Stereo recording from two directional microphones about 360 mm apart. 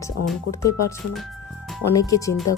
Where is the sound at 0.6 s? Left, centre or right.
Left.